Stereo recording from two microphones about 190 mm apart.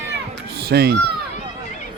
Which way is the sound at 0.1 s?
60° right (ahead or behind).